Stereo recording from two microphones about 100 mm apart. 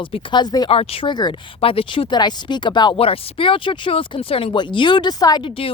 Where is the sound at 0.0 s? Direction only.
60° left (ahead or behind).